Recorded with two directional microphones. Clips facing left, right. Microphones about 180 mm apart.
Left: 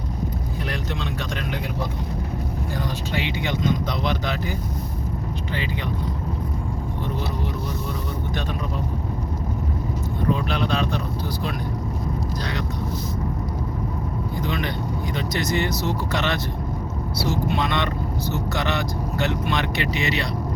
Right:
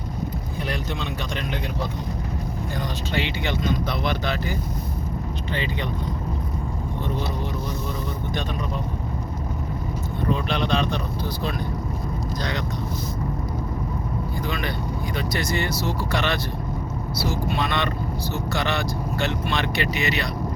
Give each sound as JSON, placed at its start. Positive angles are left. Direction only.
{"t": 3.2, "sound": "speech", "side_deg": 15}
{"t": 10.5, "sound": "speech", "side_deg": 5}
{"t": 14.4, "sound": "speech", "side_deg": 20}